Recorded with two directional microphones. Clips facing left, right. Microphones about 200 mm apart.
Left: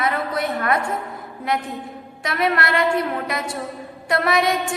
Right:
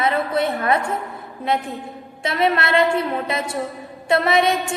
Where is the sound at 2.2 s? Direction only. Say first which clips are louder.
Right 2 dB; 25° right (ahead or behind).